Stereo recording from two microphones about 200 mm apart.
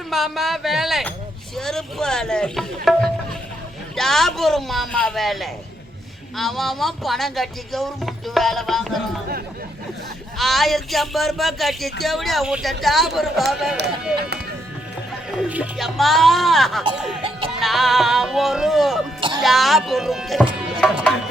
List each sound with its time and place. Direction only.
0.1 s speech: centre (ahead or behind)
10.3 s speech: centre (ahead or behind)
13.7 s speech: 55° right (ahead or behind)
15.4 s speech: 5° right (ahead or behind)